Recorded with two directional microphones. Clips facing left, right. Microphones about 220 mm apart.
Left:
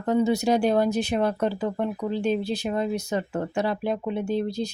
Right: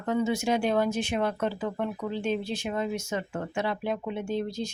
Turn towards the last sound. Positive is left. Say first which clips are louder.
# left 4 dB
turn(degrees=35)  # may be behind; listen again after turning